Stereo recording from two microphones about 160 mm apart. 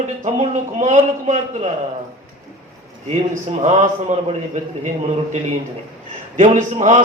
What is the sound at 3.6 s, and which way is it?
A man's voice, 50° right (ahead or behind).